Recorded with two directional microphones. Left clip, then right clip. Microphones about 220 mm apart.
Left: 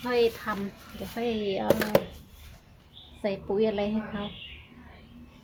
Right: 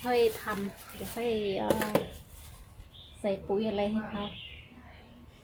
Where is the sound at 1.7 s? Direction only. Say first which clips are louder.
Left 7 dB; 50° left (ahead or behind).